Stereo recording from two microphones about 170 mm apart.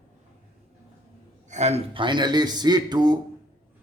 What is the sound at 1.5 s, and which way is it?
A man's voice, 40° right (ahead or behind).